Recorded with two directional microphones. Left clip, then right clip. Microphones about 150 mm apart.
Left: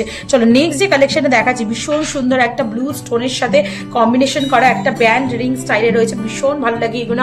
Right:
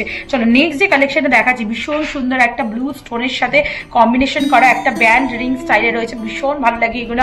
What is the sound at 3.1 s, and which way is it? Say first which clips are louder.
A woman's voice: left 1 dB; 75° left (ahead or behind).